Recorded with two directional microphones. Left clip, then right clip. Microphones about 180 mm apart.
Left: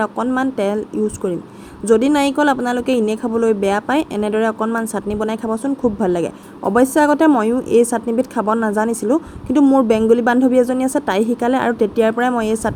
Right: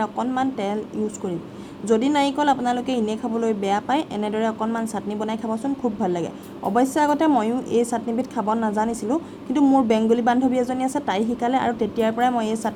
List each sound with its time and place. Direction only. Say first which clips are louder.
0.0 s speech: left 5 dB; 25° left (ahead or behind)